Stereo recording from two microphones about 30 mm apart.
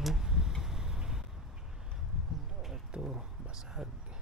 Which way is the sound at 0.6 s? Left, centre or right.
Centre.